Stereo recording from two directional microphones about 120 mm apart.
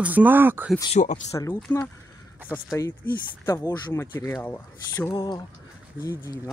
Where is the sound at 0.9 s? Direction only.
90° left.